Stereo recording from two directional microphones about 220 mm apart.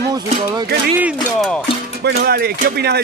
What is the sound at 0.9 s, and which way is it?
Speech, 5° right (ahead or behind).